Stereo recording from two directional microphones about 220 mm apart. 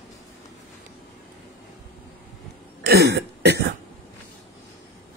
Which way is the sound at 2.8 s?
45° right (ahead or behind).